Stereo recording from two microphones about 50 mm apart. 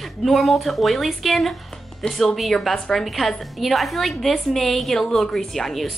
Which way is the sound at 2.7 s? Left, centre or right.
Centre.